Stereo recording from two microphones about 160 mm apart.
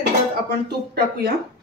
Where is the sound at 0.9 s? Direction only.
70° right (ahead or behind).